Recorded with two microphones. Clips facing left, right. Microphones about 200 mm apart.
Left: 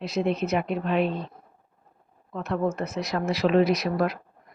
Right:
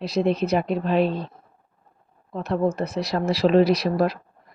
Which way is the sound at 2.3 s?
35° right (ahead or behind).